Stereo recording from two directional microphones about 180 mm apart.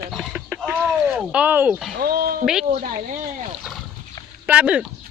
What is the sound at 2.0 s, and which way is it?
Speech, 60° right (ahead or behind).